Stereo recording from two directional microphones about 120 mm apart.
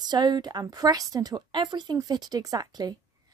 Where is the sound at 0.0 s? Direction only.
35° right (ahead or behind).